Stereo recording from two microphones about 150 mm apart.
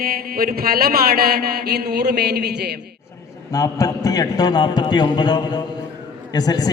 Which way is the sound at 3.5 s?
25° left (ahead or behind).